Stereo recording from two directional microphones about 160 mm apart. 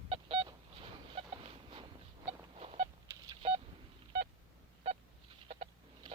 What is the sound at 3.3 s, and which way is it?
Telephone dialing, 35° right (ahead or behind).